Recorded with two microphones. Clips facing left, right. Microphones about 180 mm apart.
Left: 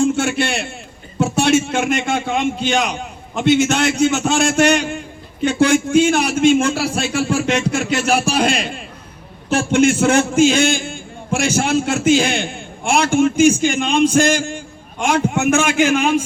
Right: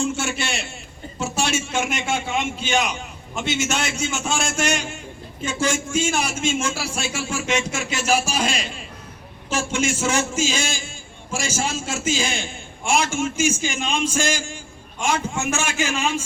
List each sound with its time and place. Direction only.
0.0 s a man's voice: 60° left (ahead or behind)